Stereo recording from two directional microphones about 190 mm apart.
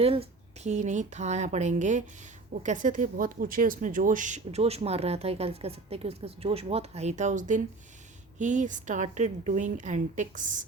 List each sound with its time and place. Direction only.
0.0 s speech: 30° right (ahead or behind)